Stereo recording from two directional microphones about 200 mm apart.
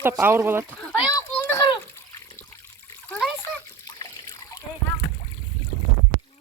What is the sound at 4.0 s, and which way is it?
Trickle, 20° left (ahead or behind).